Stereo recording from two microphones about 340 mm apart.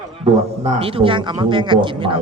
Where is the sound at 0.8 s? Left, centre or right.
Centre.